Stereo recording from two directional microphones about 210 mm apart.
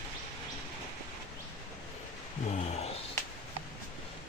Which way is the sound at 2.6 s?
30° left (ahead or behind).